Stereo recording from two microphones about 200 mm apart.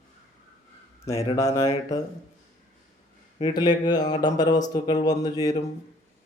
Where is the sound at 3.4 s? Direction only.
20° left (ahead or behind).